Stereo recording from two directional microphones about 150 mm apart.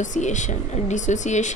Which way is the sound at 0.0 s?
55° left (ahead or behind).